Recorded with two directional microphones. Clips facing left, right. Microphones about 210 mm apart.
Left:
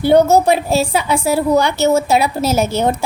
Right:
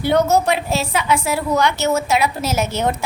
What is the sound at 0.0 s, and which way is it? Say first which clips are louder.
A woman's voice: left 5 dB; 35° left (ahead or behind).